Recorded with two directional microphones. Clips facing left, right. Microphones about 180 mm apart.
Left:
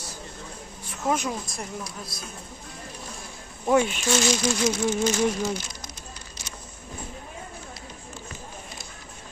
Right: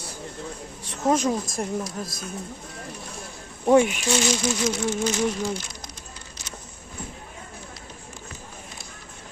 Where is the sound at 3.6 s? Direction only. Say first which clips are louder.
Right 4 dB; 25° right (ahead or behind).